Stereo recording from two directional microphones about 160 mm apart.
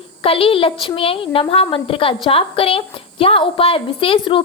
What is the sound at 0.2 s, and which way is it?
A woman's voice, 35° left (ahead or behind).